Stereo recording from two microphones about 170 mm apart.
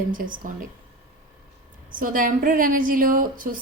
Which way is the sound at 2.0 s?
55° right (ahead or behind).